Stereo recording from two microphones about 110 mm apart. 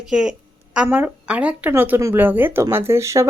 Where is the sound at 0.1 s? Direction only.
5° right (ahead or behind).